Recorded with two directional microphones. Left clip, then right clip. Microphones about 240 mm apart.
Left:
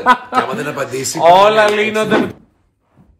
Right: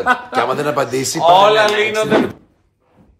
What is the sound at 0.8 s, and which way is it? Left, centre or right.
Speech, right.